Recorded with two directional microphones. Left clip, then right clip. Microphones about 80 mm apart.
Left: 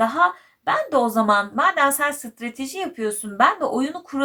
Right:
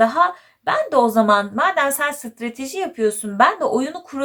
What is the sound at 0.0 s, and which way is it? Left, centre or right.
A woman's voice, right.